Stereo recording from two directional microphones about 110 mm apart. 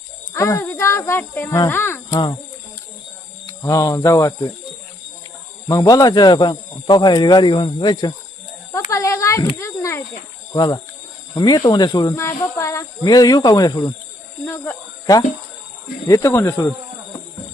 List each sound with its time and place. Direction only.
0.3 s speech: 25° left (ahead or behind)
1.5 s cricket: 25° left (ahead or behind)
2.0 s speech: 40° left (ahead or behind)
3.4 s cricket: 30° left (ahead or behind)
5.6 s speech: 35° left (ahead or behind)
8.7 s a sound: 30° left (ahead or behind)
10.5 s speech: 35° left (ahead or behind)
12.1 s cricket: 25° left (ahead or behind)
13.0 s speech: 35° left (ahead or behind)
14.4 s cricket: 20° left (ahead or behind)
16.0 s cricket: 30° left (ahead or behind)